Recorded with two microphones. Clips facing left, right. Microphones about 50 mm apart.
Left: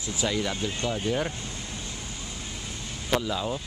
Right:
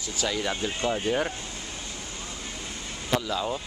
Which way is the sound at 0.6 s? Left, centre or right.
Right.